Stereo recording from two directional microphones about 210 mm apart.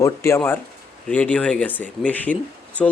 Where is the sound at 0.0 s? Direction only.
10° left (ahead or behind).